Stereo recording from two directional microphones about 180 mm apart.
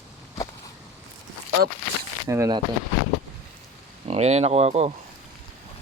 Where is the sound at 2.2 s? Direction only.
15° right (ahead or behind).